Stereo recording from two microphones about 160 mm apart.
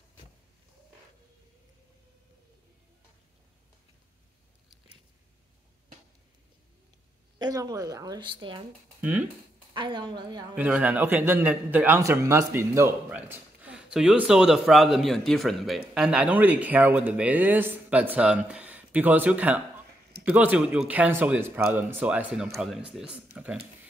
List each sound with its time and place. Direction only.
7.3 s a woman's voice: 25° right (ahead or behind)
9.0 s a man's voice: 10° right (ahead or behind)
9.8 s a woman's voice: 30° right (ahead or behind)
10.5 s a man's voice: 10° right (ahead or behind)